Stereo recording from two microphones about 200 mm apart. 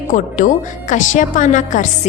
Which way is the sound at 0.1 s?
40° left (ahead or behind).